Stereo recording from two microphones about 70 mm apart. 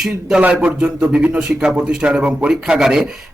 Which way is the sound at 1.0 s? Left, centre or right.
Centre.